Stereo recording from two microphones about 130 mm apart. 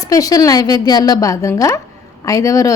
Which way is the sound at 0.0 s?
25° left (ahead or behind).